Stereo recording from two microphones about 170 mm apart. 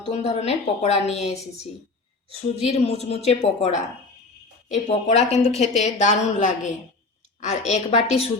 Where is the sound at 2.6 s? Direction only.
40° left (ahead or behind).